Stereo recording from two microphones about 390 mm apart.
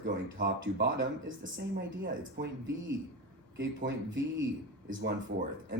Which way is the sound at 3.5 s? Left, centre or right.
Right.